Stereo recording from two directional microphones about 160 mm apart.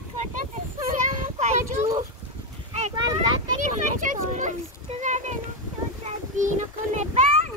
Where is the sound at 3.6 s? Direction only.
55° right (ahead or behind).